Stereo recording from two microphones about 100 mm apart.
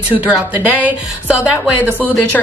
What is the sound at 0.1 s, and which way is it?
Speech, 15° right (ahead or behind).